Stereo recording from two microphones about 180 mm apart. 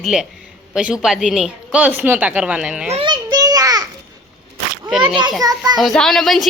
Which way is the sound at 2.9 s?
25° right (ahead or behind).